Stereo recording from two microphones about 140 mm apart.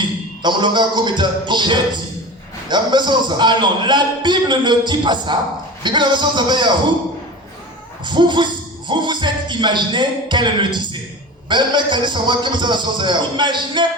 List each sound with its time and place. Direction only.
0.4 s a man's voice: 35° right (ahead or behind)
8.0 s a man's voice: 35° right (ahead or behind)